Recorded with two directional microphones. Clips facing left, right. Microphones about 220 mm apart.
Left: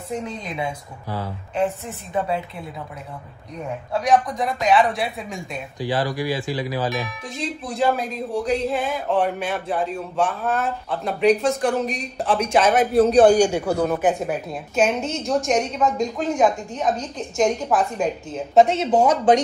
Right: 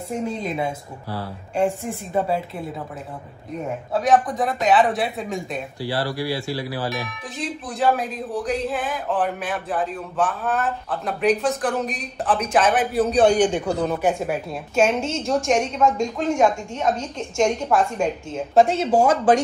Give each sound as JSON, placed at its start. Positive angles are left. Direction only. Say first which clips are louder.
{"t": 1.9, "sound": "a woman's voice", "louder": "right 2 dB", "side_deg": -5}
{"t": 3.9, "sound": "a man's voice", "louder": "right 1 dB", "side_deg": 0}
{"t": 5.8, "sound": "speech", "louder": "left 3 dB", "side_deg": 15}
{"t": 7.3, "sound": "a man's voice", "louder": "left 2 dB", "side_deg": 0}
{"t": 13.2, "sound": "a man's voice", "louder": "even", "side_deg": 10}